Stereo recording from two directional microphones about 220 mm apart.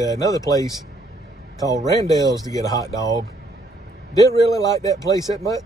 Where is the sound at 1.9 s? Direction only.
15° left (ahead or behind).